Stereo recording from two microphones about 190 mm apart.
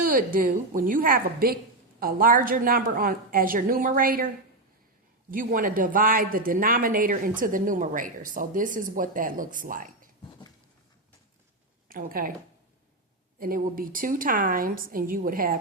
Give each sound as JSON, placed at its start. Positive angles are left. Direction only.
{"t": 0.0, "sound": "speech", "side_deg": -45}
{"t": 5.3, "sound": "speech", "side_deg": -45}
{"t": 11.9, "sound": "speech", "side_deg": -50}
{"t": 13.4, "sound": "speech", "side_deg": -50}